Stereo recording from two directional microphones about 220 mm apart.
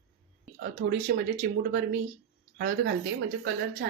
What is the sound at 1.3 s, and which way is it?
Speech, 45° right (ahead or behind).